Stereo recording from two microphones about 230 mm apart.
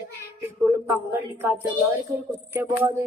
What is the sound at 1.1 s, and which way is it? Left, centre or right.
A child's voice, centre.